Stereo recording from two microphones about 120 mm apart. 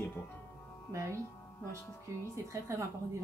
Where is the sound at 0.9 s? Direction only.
25° right (ahead or behind).